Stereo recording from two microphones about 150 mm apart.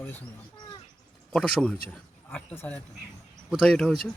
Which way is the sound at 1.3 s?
5° left (ahead or behind).